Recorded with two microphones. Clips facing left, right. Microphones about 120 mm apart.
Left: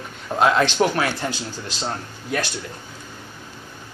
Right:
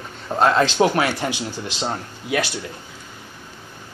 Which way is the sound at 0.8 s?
15° right (ahead or behind).